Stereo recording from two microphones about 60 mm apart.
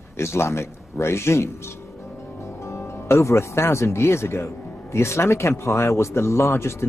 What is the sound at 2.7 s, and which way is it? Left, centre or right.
Speech, left.